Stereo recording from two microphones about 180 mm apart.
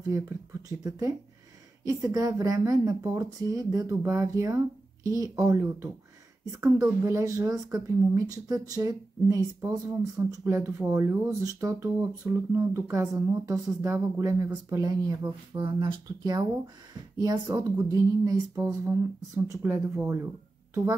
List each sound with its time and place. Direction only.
0.0 s a woman's voice: 15° right (ahead or behind)